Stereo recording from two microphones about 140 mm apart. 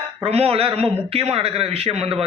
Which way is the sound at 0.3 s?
45° right (ahead or behind).